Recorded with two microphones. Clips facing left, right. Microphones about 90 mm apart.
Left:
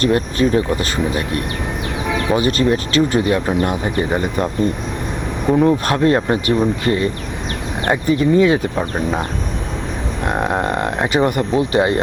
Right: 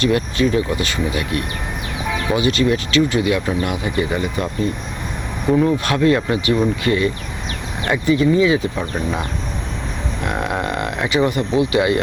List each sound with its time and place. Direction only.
0.0 s speech: 40° left (ahead or behind)
5.5 s speech: 40° left (ahead or behind)
8.7 s speech: 40° left (ahead or behind)
10.2 s speech: 40° left (ahead or behind)